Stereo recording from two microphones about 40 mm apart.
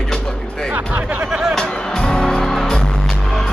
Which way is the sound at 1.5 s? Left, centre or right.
Left.